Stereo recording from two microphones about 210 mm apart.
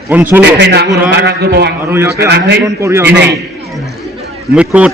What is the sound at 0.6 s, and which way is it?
A man's voice, 55° right (ahead or behind).